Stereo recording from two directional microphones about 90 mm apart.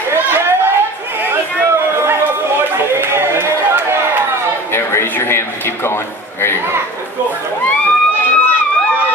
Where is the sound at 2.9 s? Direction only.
25° right (ahead or behind).